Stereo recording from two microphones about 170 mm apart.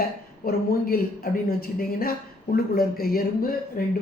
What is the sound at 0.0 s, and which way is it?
Speech, 65° left (ahead or behind).